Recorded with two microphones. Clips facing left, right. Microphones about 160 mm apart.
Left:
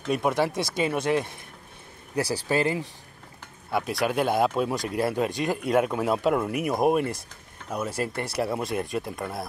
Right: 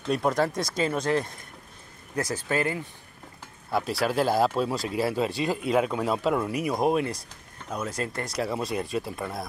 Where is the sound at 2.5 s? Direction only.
25° left (ahead or behind).